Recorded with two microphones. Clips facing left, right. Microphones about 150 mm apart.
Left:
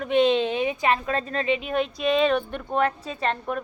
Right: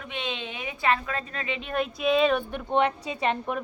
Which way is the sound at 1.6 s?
5° left (ahead or behind).